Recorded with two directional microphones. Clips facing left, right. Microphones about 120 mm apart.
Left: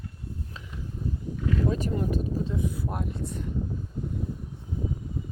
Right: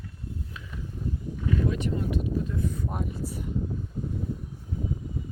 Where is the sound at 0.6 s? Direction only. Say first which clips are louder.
Even; 30° left (ahead or behind).